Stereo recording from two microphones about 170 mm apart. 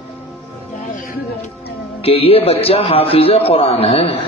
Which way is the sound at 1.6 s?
35° left (ahead or behind).